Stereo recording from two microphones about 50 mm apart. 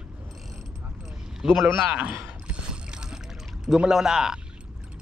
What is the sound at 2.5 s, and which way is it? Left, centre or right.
Boat, centre.